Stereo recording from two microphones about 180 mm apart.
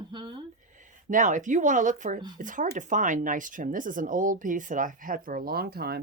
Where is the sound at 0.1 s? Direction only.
25° right (ahead or behind).